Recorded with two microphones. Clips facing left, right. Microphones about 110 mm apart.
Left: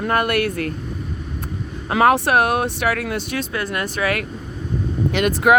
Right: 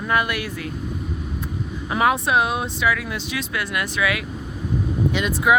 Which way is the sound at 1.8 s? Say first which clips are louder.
Left 4 dB; 60° left (ahead or behind).